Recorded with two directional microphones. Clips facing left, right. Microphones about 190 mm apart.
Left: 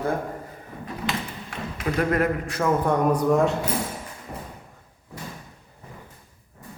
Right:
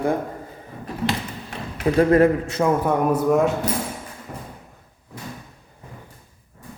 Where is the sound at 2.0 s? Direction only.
30° right (ahead or behind).